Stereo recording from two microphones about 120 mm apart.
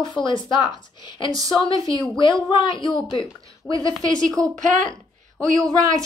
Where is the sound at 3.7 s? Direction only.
30° right (ahead or behind).